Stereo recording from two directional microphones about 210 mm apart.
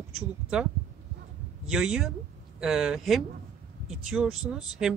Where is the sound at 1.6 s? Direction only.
Centre (ahead or behind).